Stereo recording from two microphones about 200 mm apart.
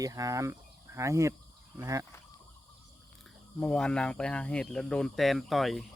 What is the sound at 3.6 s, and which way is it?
Speech, 5° left (ahead or behind).